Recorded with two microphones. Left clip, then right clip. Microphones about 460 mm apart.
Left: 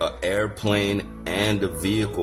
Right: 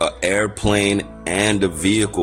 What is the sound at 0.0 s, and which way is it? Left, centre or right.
Speech, left.